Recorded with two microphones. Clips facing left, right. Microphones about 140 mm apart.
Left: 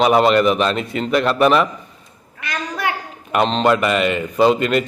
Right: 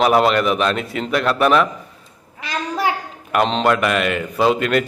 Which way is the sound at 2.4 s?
30° right (ahead or behind).